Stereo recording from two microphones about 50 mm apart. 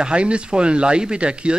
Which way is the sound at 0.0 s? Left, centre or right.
Right.